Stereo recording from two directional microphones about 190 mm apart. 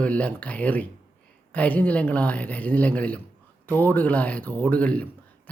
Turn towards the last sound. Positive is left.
turn(degrees=5)  # may be behind; listen again after turning